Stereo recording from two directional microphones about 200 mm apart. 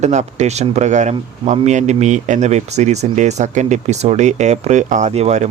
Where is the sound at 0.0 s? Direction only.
35° right (ahead or behind).